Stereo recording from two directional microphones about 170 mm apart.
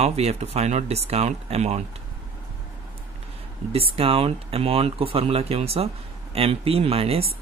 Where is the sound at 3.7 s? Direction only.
35° right (ahead or behind).